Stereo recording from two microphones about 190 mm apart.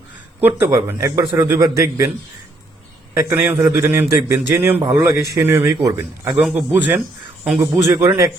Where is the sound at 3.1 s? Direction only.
10° right (ahead or behind).